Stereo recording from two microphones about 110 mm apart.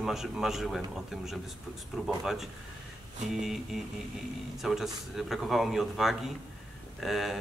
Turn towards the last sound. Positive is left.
turn(degrees=0)  # may be behind; listen again after turning